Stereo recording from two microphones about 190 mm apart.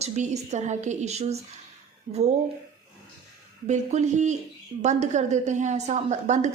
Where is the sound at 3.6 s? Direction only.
40° right (ahead or behind).